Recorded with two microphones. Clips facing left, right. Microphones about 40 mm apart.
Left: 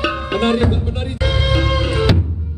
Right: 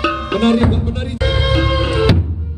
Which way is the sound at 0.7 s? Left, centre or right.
Left.